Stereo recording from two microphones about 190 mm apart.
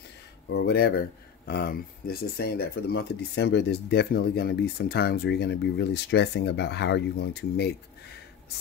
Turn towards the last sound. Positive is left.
turn(degrees=60)  # may be behind; listen again after turning